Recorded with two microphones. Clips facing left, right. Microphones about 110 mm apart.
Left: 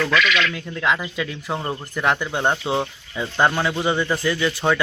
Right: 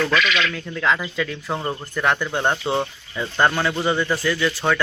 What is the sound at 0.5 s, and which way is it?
Speech, 10° left (ahead or behind).